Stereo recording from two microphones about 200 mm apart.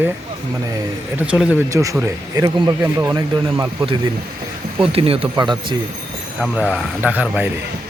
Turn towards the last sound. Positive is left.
turn(degrees=-10)  # may be behind; listen again after turning